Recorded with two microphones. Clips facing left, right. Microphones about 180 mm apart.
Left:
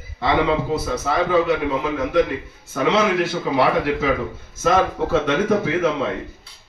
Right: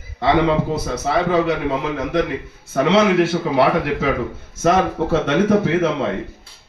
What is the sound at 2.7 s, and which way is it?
A man's voice, 65° right (ahead or behind).